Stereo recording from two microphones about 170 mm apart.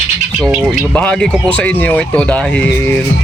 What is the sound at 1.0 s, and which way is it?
Speech, 10° left (ahead or behind).